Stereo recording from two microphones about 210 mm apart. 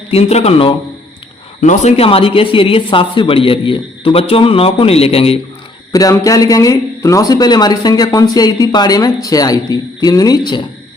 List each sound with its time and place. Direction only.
0.1 s speech: 30° left (ahead or behind)
5.9 s speech: 15° left (ahead or behind)